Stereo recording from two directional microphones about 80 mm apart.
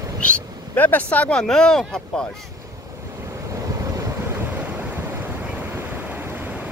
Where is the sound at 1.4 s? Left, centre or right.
Centre.